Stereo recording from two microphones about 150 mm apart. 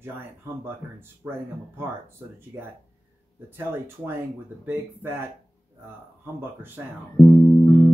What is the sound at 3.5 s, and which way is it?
Speech, 15° right (ahead or behind).